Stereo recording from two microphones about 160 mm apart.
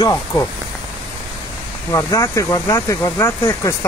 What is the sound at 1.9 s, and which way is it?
Speech, 20° left (ahead or behind).